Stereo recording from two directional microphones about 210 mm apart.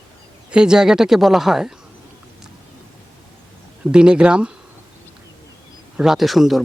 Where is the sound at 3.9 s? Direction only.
5° right (ahead or behind).